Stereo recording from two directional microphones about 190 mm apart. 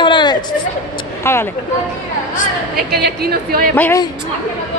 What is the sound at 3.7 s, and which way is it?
Speech, 10° left (ahead or behind).